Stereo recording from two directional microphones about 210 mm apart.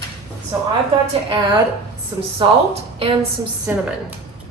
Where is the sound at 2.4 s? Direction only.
25° right (ahead or behind).